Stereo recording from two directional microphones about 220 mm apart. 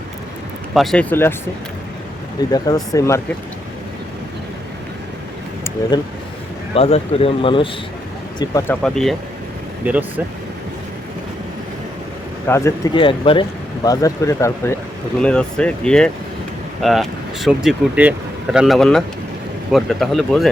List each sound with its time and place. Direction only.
0.7 s speech: centre (ahead or behind)
2.5 s speech: 15° left (ahead or behind)
5.9 s speech: 20° left (ahead or behind)
8.4 s speech: 10° left (ahead or behind); by 10.1 s 5° right (ahead or behind)
12.5 s speech: 10° left (ahead or behind)